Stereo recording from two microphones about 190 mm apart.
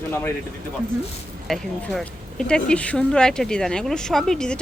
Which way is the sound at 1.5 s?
Centre (ahead or behind).